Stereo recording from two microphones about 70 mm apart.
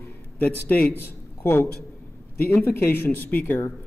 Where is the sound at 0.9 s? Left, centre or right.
Left.